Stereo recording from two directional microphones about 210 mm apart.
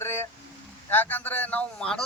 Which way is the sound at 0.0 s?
10° left (ahead or behind).